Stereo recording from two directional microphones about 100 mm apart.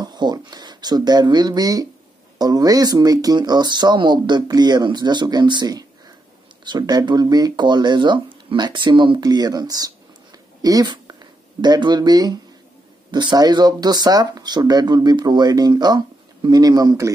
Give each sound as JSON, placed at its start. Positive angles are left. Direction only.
{"t": 0.0, "sound": "speech", "side_deg": -45}
{"t": 9.2, "sound": "speech", "side_deg": -40}